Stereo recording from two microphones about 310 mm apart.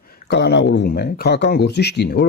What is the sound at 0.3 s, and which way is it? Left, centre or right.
Speech, left.